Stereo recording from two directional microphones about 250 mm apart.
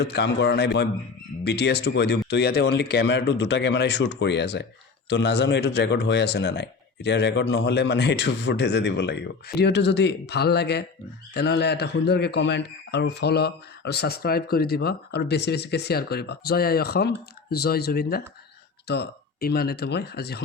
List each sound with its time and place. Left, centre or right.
0.0 s a man's voice: left